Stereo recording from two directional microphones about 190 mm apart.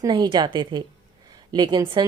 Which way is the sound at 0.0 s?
25° right (ahead or behind).